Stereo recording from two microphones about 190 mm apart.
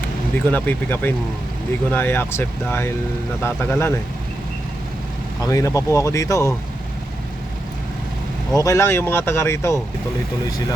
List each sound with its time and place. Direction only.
0.5 s speech: 10° left (ahead or behind)
5.4 s speech: 15° left (ahead or behind)
8.5 s speech: 15° left (ahead or behind)